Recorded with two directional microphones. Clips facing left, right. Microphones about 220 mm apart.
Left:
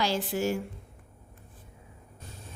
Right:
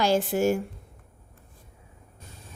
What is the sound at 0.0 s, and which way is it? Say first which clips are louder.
Speech: right 6 dB; 50° right (ahead or behind).